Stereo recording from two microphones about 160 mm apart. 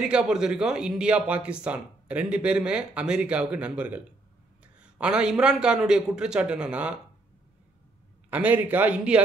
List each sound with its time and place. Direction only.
0.1 s a man's voice: 5° right (ahead or behind)
8.3 s speech: 10° right (ahead or behind)